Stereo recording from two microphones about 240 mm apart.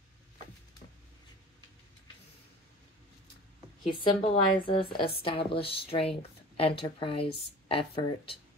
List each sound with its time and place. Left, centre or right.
4.0 s speech: left